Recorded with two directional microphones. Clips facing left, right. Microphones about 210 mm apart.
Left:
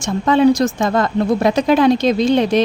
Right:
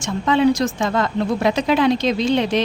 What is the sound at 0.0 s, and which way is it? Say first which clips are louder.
Speech: left 4 dB; 40° left (ahead or behind).